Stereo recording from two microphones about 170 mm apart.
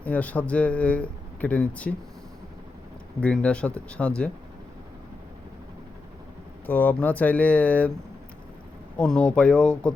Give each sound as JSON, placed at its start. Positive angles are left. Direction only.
{"t": 0.0, "sound": "speech", "side_deg": 10}
{"t": 3.2, "sound": "speech", "side_deg": 5}
{"t": 6.7, "sound": "speech", "side_deg": 10}
{"t": 9.0, "sound": "speech", "side_deg": 5}